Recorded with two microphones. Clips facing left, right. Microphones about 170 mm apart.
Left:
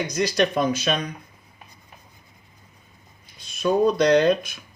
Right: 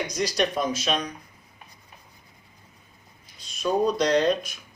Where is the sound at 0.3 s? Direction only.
65° left (ahead or behind).